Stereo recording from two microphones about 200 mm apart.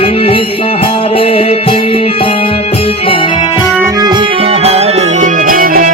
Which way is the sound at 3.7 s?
10° right (ahead or behind).